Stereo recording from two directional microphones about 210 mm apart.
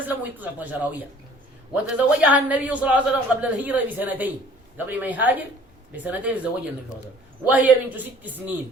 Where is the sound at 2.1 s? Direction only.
5° right (ahead or behind).